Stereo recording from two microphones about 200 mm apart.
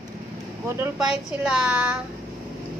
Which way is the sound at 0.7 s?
5° right (ahead or behind).